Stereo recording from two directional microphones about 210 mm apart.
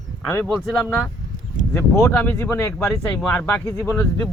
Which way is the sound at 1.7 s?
15° left (ahead or behind).